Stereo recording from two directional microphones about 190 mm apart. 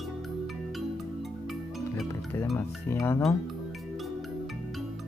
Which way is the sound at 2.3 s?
15° left (ahead or behind).